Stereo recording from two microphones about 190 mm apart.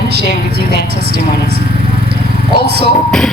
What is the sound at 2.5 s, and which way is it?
Speech, 60° right (ahead or behind).